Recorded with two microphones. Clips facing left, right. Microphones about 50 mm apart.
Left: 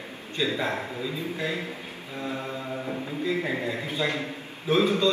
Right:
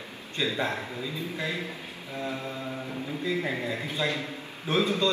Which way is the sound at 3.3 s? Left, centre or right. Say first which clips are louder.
Left 2 dB; left.